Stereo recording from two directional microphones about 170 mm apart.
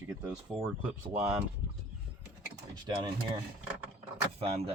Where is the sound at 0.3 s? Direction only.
5° right (ahead or behind).